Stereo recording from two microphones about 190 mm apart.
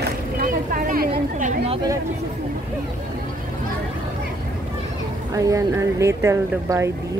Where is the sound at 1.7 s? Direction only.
20° right (ahead or behind).